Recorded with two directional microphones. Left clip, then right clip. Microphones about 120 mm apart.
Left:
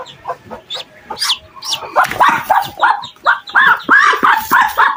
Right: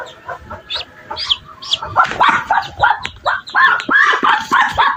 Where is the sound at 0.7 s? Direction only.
35° left (ahead or behind).